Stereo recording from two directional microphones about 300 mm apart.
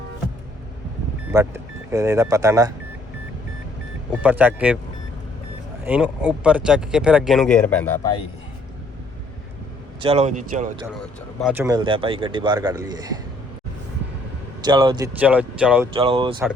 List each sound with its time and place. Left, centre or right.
1.3 s speech: centre
4.2 s speech: centre
5.8 s speech: centre
10.0 s a man's voice: right
11.0 s speech: centre
14.6 s speech: centre
16.0 s speech: centre